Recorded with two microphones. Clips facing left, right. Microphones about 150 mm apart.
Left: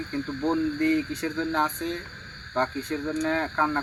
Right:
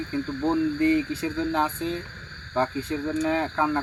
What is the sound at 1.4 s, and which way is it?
Speech, 10° right (ahead or behind).